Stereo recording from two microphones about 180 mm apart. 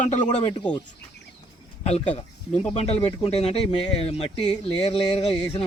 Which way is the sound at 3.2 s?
35° left (ahead or behind).